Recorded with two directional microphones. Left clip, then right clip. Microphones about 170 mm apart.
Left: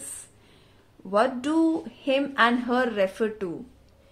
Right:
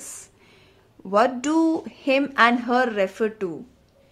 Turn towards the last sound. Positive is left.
turn(degrees=-15)  # may be behind; listen again after turning